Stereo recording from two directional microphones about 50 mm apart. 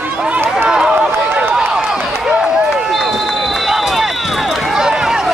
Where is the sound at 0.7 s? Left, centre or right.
Centre.